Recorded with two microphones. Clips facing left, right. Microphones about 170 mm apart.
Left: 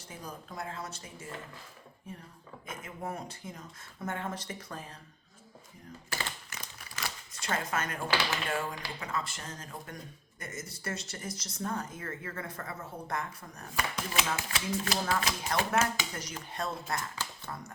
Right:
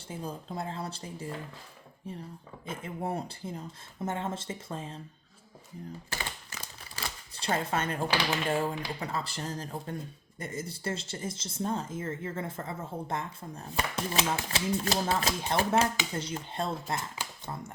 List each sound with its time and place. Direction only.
0.1 s a man's voice: 25° right (ahead or behind)
2.6 s a man's voice: 30° right (ahead or behind)
6.5 s crumpling: 30° right (ahead or behind)
8.4 s a man's voice: 30° right (ahead or behind)